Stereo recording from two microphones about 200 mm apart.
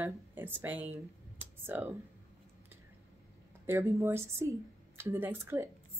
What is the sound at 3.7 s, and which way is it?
A woman's voice, 10° right (ahead or behind).